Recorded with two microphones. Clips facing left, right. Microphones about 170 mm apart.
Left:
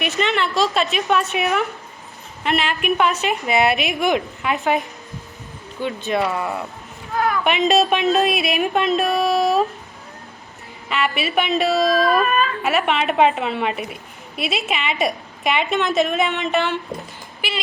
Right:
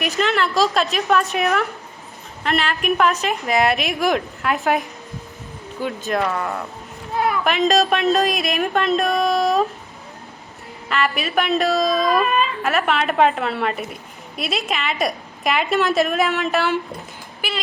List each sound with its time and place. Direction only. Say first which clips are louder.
0.0 s a woman's voice: right 1 dB; centre (ahead or behind)
6.1 s a woman's voice: left 1 dB; 5° left (ahead or behind)
10.8 s a woman's voice: even; centre (ahead or behind)
12.2 s a sound: even; 20° right (ahead or behind)
12.6 s a woman's voice: even; centre (ahead or behind)